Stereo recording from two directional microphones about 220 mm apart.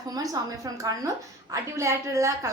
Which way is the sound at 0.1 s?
15° right (ahead or behind).